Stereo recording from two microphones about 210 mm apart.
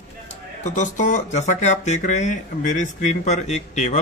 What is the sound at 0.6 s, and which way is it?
Speech, 35° left (ahead or behind).